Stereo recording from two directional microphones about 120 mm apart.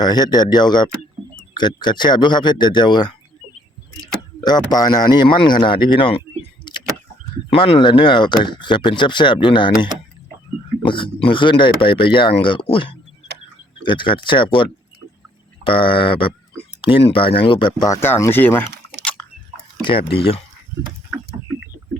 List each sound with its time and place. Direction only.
0.0 s speech: 35° left (ahead or behind)
4.4 s speech: 35° left (ahead or behind)
7.5 s speech: 50° left (ahead or behind); by 18.1 s 30° left (ahead or behind)
18.1 s speech: 15° left (ahead or behind)
19.8 s speech: 45° left (ahead or behind)